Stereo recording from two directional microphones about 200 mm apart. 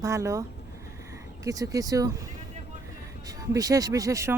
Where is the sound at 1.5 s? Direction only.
15° right (ahead or behind).